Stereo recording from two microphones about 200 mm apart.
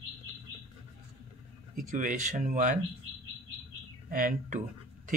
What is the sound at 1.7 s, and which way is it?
Speech, 40° right (ahead or behind).